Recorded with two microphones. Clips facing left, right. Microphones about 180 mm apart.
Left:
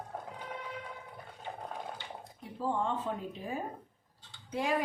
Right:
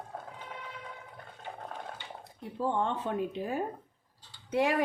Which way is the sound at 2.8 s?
70° right (ahead or behind).